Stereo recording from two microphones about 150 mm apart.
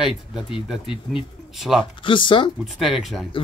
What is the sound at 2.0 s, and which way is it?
Speech, 35° left (ahead or behind).